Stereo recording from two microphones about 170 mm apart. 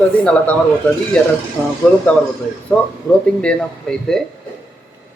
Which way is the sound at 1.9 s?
5° left (ahead or behind).